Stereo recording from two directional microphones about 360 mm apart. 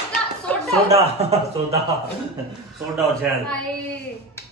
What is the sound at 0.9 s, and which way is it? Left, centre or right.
Speech, centre.